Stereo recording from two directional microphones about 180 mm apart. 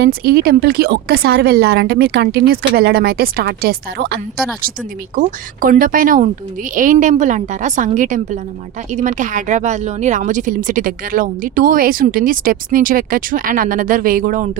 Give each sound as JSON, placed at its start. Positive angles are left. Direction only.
{"t": 0.0, "sound": "a woman's voice", "side_deg": -55}
{"t": 5.1, "sound": "speech", "side_deg": -50}